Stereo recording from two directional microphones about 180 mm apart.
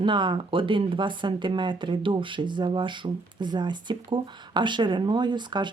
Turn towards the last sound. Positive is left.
turn(degrees=-25)  # may be behind; listen again after turning